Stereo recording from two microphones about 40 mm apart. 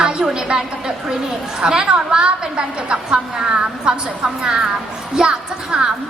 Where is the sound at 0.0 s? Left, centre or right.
Right.